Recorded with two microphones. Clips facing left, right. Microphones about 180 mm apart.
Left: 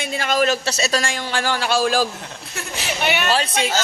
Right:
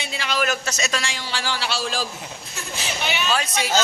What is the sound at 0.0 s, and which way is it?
Speech, 50° left (ahead or behind).